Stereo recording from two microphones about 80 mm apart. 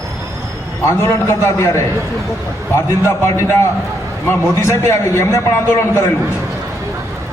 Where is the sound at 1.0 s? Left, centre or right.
Left.